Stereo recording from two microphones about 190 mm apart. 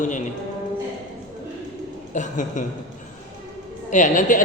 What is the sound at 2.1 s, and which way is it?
Speech, 40° left (ahead or behind).